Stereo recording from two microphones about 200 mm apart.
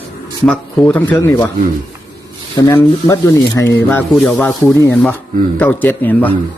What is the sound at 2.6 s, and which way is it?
Speech, 15° left (ahead or behind).